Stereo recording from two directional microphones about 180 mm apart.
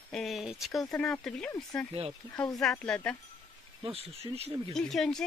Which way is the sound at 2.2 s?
25° right (ahead or behind).